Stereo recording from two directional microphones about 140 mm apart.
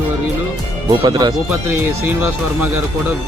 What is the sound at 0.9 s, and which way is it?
Speech, 30° right (ahead or behind).